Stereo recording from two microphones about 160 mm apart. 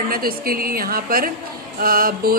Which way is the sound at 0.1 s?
65° right (ahead or behind).